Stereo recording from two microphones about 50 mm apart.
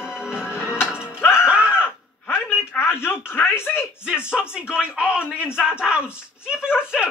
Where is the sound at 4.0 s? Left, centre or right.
Centre.